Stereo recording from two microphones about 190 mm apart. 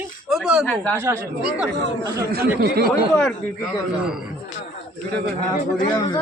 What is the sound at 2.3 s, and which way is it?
Speech, 55° right (ahead or behind).